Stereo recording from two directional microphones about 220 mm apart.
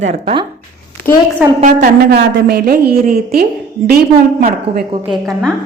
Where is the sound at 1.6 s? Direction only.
40° right (ahead or behind).